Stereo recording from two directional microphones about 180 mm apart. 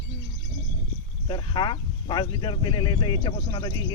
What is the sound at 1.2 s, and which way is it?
Speech, 25° left (ahead or behind).